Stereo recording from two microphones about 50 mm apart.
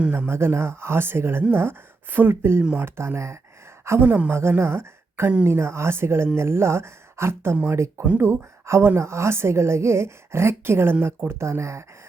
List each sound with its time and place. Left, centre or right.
0.3 s a woman's voice: right
11.3 s speech: right